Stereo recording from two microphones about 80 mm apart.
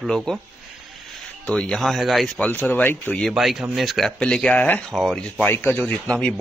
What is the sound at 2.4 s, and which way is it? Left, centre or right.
Speech, left.